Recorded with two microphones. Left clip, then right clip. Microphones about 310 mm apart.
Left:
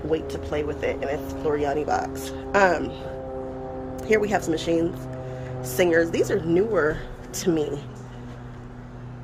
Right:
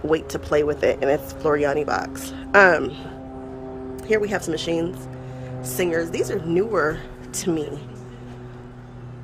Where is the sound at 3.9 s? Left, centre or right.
Centre.